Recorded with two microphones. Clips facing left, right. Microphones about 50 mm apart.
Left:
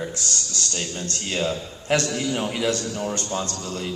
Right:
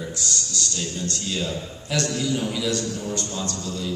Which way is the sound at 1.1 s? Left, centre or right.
Left.